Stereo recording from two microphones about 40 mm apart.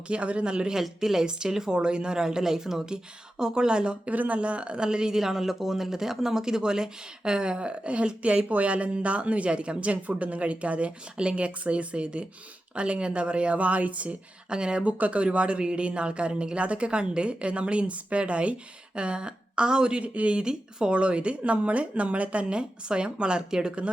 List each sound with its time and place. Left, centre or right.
0.1 s speech: right
0.8 s speech: centre
4.1 s speech: right
4.4 s speech: right
14.5 s speech: right
14.8 s speech: right; by 20.9 s centre
20.9 s speech: right